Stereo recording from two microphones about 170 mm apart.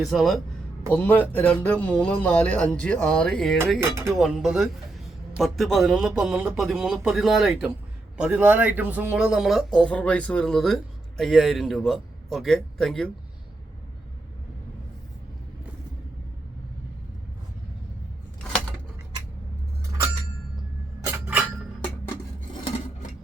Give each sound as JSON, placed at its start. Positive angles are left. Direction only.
{"t": 0.0, "sound": "speech", "side_deg": 0}
{"t": 3.8, "sound": "speech", "side_deg": -15}
{"t": 4.2, "sound": "speech", "side_deg": -5}
{"t": 21.0, "sound": "a sound", "side_deg": -10}